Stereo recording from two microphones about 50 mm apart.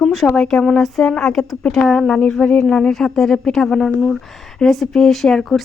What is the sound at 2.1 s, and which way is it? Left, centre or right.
A woman's voice, left.